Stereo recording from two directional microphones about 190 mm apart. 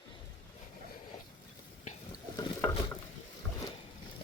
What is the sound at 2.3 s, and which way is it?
Boat, 15° left (ahead or behind).